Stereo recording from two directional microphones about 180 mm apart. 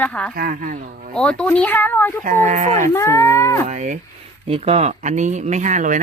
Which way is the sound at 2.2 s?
45° right (ahead or behind).